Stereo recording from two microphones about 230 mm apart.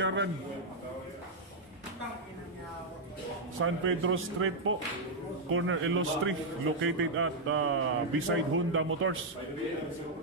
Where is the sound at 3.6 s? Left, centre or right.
Right.